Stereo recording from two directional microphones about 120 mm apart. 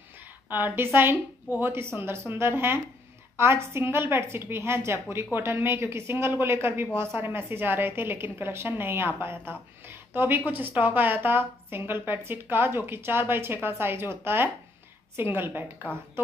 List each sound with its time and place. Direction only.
0.7 s a woman's voice: 15° right (ahead or behind)